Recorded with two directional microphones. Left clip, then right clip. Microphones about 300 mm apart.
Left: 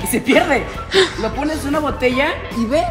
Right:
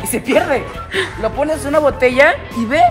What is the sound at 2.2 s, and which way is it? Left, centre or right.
Speech, right.